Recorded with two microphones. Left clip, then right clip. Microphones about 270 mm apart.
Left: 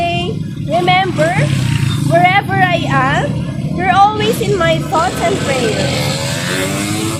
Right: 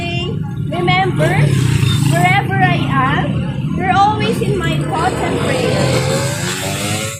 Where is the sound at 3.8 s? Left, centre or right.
Left.